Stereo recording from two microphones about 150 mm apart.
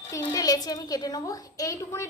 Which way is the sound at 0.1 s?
20° left (ahead or behind).